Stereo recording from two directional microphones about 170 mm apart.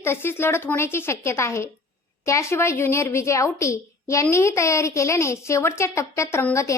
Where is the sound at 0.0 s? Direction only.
15° left (ahead or behind).